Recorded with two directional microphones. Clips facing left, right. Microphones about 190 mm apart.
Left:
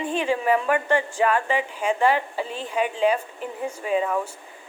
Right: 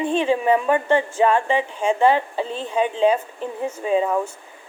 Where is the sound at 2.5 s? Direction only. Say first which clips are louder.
Right 4 dB; 10° left (ahead or behind).